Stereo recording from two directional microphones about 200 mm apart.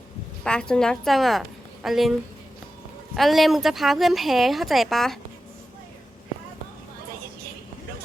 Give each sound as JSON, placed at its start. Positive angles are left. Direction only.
{"t": 0.4, "sound": "a woman's voice", "side_deg": 5}
{"t": 3.2, "sound": "speech", "side_deg": 0}